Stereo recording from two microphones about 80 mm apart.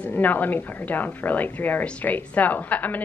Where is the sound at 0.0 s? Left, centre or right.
Left.